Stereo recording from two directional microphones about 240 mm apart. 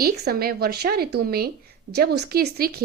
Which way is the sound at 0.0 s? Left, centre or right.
Right.